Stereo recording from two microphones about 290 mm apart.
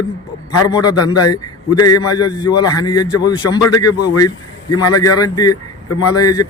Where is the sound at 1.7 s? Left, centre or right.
Left.